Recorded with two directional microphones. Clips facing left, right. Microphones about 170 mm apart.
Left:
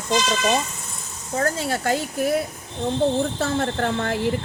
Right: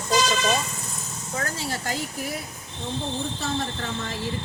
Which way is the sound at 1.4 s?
55° left (ahead or behind).